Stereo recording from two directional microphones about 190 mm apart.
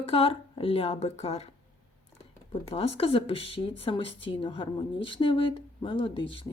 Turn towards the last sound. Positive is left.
turn(degrees=25)  # may be behind; listen again after turning